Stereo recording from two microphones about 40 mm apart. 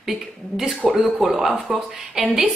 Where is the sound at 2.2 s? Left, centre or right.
Centre.